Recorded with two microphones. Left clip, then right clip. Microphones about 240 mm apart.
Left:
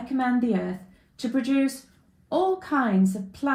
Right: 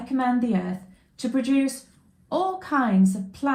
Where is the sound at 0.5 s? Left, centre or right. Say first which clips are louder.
Even; right.